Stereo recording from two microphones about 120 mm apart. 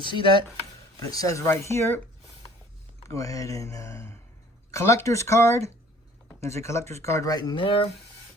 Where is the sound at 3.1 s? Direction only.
30° left (ahead or behind).